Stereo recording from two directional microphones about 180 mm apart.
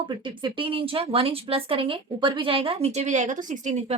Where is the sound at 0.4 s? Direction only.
30° right (ahead or behind).